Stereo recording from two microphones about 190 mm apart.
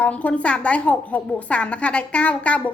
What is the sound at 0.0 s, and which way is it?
A woman's voice, 5° left (ahead or behind).